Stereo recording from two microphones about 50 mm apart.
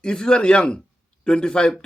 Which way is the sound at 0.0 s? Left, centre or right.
Centre.